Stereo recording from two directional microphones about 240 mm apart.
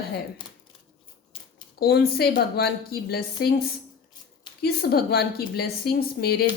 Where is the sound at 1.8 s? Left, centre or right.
Left.